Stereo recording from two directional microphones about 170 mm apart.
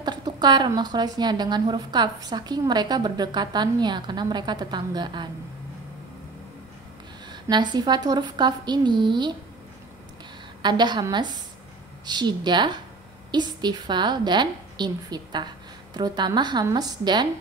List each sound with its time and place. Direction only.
0.0 s a woman's voice: 25° right (ahead or behind)
7.4 s a woman's voice: 25° right (ahead or behind)
10.6 s a woman's voice: 25° right (ahead or behind)